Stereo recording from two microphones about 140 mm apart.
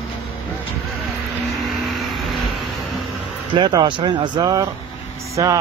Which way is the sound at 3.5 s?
30° right (ahead or behind).